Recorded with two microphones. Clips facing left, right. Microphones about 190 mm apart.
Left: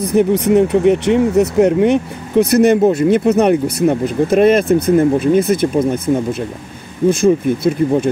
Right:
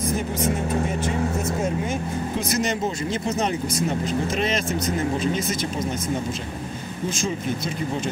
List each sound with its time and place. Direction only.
0.0 s speech: 65° left (ahead or behind)